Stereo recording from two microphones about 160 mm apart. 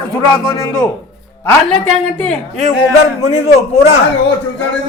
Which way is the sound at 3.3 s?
40° left (ahead or behind).